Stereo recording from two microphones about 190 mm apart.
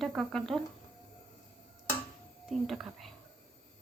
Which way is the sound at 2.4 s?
Centre (ahead or behind).